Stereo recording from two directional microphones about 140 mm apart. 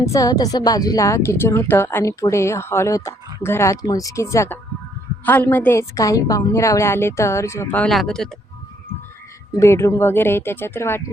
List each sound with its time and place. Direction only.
0.0 s speech: 25° left (ahead or behind); by 8.3 s 5° left (ahead or behind)
9.6 s speech: 20° left (ahead or behind)